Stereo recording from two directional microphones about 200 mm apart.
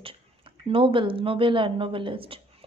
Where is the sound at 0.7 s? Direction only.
25° right (ahead or behind).